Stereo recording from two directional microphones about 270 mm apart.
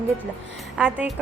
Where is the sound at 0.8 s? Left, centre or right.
Centre.